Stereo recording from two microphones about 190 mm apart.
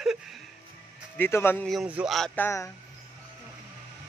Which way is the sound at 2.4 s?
15° left (ahead or behind).